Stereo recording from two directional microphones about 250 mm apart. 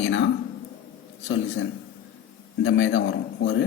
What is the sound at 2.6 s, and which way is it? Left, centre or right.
Speech, left.